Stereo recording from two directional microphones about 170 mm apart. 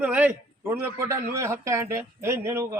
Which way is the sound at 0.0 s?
10° right (ahead or behind).